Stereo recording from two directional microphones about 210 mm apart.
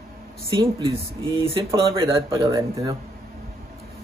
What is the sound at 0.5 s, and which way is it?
Speech, 20° right (ahead or behind).